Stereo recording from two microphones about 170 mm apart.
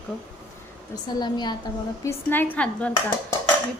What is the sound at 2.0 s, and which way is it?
Speech, 15° left (ahead or behind).